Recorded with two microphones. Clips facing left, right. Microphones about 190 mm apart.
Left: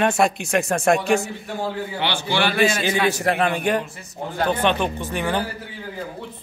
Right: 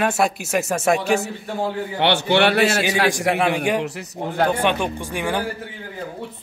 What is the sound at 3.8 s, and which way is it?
Speech, 75° right (ahead or behind).